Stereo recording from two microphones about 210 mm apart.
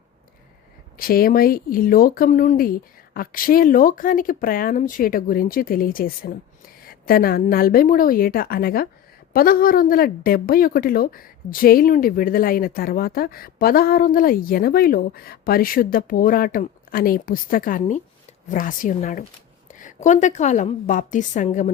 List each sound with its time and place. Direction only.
0.9 s a woman's voice: 45° left (ahead or behind)